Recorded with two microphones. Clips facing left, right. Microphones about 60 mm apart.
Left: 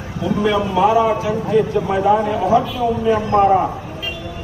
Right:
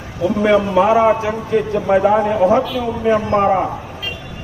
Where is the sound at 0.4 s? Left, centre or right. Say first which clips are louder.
Right 2 dB; right.